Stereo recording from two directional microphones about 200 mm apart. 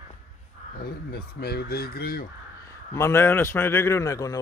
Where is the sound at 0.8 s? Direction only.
50° left (ahead or behind).